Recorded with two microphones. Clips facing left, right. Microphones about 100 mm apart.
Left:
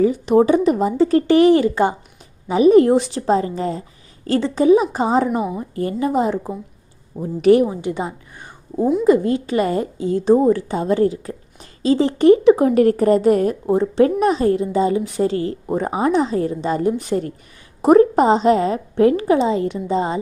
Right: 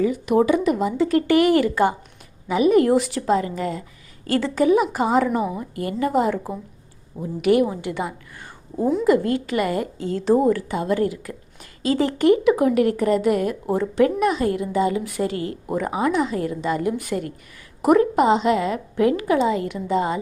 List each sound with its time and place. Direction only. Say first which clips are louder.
0.0 s a woman's voice: left 4 dB; 35° left (ahead or behind)
7.2 s a woman's voice: left 5 dB; 35° left (ahead or behind)
7.7 s a sound: left 3 dB; 20° left (ahead or behind)
9.0 s a woman's voice: left 4 dB; 20° left (ahead or behind)